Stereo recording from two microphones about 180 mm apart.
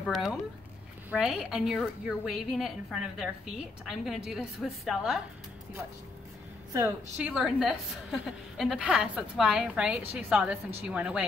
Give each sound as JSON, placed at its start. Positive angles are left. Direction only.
{"t": 0.0, "sound": "a woman's voice", "side_deg": 0}
{"t": 6.7, "sound": "a woman's voice", "side_deg": -15}
{"t": 7.3, "sound": "a woman's voice", "side_deg": -5}